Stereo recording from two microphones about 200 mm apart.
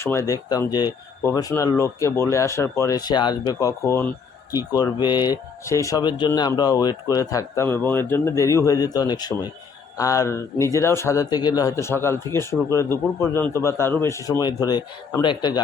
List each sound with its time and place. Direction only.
0.0 s speech: 15° left (ahead or behind)